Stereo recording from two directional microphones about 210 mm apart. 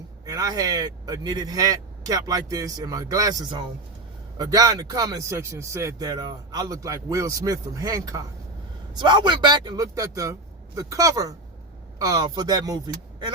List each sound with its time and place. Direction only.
0.3 s speech: 15° right (ahead or behind)